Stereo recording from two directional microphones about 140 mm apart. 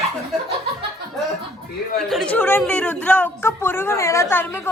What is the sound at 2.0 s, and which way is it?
A woman's voice, centre (ahead or behind).